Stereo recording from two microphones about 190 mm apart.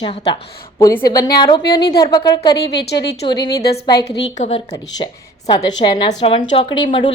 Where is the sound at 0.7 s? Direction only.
15° left (ahead or behind).